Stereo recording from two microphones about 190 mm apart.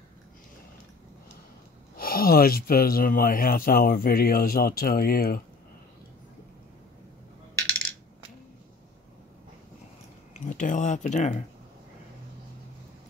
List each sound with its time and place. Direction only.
2.0 s speech: 50° left (ahead or behind)
10.4 s speech: 40° left (ahead or behind)